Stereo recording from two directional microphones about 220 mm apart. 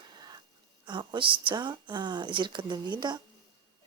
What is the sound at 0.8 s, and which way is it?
Speech, 20° right (ahead or behind).